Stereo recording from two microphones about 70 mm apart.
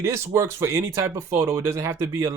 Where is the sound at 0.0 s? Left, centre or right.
Right.